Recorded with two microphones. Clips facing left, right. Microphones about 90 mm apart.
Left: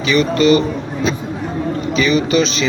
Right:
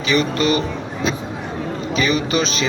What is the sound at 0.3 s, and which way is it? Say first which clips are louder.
Speech: left 6 dB; 35° left (ahead or behind).